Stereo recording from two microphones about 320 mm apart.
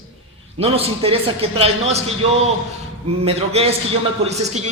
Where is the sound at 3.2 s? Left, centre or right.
Centre.